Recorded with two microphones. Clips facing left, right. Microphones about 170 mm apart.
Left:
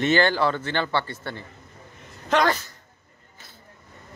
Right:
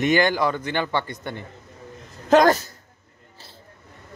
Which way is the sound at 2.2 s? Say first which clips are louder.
Right 6 dB; 40° right (ahead or behind).